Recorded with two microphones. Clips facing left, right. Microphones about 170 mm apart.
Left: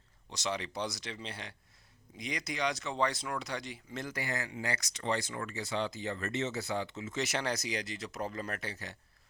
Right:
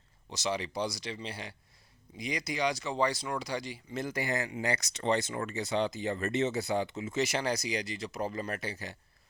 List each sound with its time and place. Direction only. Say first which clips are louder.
0.3 s speech: right 3 dB; centre (ahead or behind)
4.0 s speech: right 5 dB; 15° right (ahead or behind)
7.2 s speech: right 3 dB; 5° right (ahead or behind)